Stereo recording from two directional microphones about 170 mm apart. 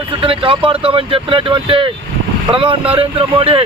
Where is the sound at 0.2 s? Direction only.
30° right (ahead or behind).